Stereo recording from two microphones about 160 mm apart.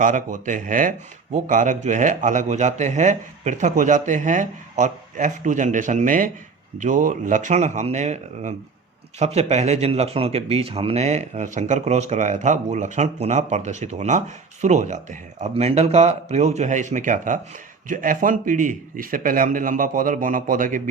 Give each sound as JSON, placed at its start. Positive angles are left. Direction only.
{"t": 0.0, "sound": "speech", "side_deg": -55}